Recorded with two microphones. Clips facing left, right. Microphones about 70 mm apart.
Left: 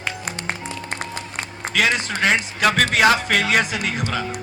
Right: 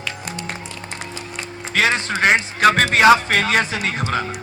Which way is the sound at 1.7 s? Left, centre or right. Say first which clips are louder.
Right 2 dB; right.